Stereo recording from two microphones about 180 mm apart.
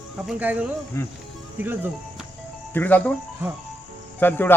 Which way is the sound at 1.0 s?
15° left (ahead or behind).